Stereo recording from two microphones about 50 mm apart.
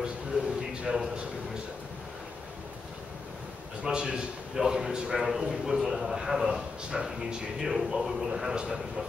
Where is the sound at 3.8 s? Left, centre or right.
Centre.